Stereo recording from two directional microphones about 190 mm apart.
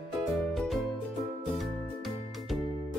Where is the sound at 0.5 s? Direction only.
Centre (ahead or behind).